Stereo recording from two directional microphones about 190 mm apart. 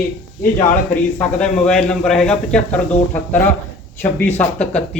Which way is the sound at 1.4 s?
5° left (ahead or behind).